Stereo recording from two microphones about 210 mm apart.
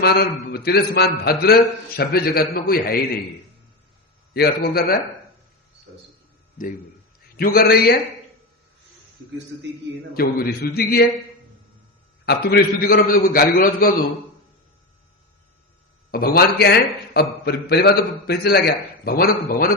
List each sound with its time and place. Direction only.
0.0 s a man's voice: 50° left (ahead or behind)
4.4 s a man's voice: 50° left (ahead or behind)
5.9 s speech: 55° right (ahead or behind)
7.3 s a man's voice: 45° left (ahead or behind)
10.2 s a man's voice: 45° left (ahead or behind)
12.2 s a man's voice: 50° left (ahead or behind)
16.1 s a man's voice: 45° left (ahead or behind)